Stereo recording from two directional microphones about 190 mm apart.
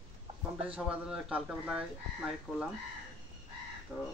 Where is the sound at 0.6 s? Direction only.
5° right (ahead or behind).